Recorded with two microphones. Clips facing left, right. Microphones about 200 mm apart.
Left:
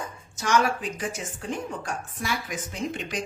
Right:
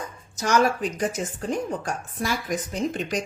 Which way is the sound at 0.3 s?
40° right (ahead or behind).